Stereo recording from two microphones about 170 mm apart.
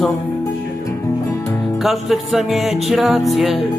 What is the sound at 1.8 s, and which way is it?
Music, centre (ahead or behind).